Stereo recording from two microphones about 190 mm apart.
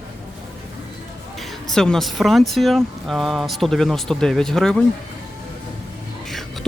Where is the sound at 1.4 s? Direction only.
Centre (ahead or behind).